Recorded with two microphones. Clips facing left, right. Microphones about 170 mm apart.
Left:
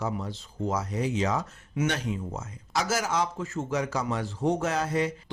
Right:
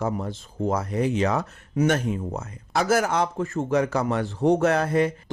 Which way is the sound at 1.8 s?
50° right (ahead or behind).